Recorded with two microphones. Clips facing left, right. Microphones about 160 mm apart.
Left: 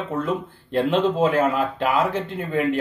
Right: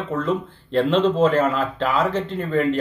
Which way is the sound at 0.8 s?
50° left (ahead or behind).